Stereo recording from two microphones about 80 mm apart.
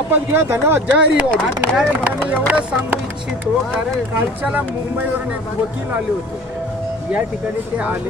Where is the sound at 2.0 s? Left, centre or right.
Centre.